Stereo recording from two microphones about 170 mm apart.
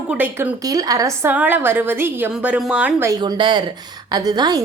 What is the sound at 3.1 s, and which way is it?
A woman's voice, 25° right (ahead or behind).